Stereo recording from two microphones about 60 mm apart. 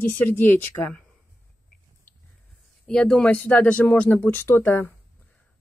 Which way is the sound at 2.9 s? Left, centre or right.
Centre.